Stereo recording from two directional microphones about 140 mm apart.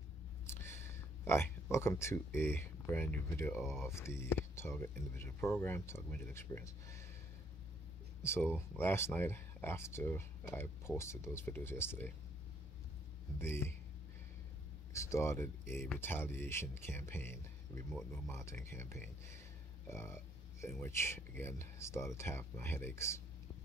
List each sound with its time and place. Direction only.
0.5 s speech: 15° left (ahead or behind)
8.2 s speech: 15° left (ahead or behind)
13.4 s speech: 15° left (ahead or behind)
14.9 s speech: 20° left (ahead or behind)
18.3 s speech: 20° left (ahead or behind)